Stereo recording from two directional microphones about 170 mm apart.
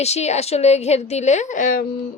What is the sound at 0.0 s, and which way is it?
A woman's voice, 40° left (ahead or behind).